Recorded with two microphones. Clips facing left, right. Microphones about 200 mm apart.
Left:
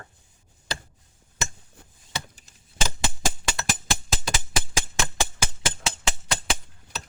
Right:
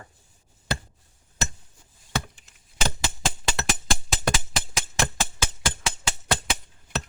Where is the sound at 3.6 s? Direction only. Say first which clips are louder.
Right 1 dB; 65° right (ahead or behind).